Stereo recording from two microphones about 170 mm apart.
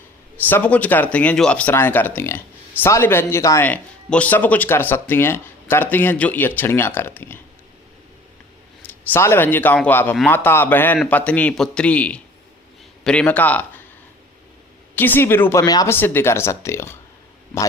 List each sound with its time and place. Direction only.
0.4 s speech: 10° left (ahead or behind)
8.9 s speech: 15° left (ahead or behind)
14.9 s speech: 10° left (ahead or behind)